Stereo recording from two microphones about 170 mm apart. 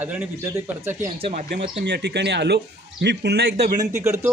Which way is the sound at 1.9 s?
80° right.